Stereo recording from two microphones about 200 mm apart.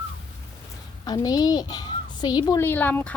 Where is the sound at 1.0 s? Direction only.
20° left (ahead or behind).